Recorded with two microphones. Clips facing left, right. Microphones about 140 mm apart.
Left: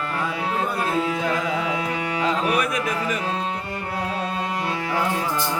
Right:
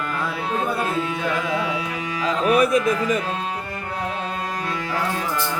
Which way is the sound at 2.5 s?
30° right (ahead or behind).